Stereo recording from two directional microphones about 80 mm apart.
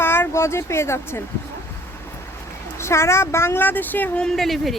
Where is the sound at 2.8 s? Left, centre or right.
Left.